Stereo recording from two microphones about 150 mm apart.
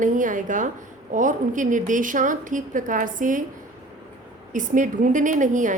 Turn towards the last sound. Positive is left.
turn(degrees=-55)  # may be behind; listen again after turning